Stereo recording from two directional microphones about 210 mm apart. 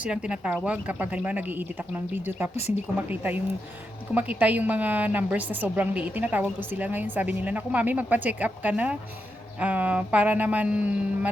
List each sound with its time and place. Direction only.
0.0 s a woman's voice: 5° right (ahead or behind)